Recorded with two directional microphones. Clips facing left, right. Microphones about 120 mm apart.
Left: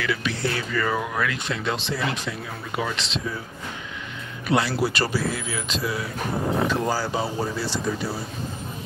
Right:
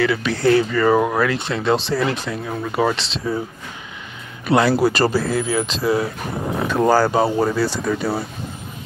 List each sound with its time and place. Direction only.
0.0 s speech: 35° right (ahead or behind)
4.6 s speech: 50° right (ahead or behind)
6.7 s speech: 55° right (ahead or behind)